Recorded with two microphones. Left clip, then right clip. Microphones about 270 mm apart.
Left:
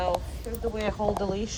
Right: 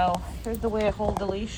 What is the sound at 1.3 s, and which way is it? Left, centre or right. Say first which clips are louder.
Speech: left 1 dB; left.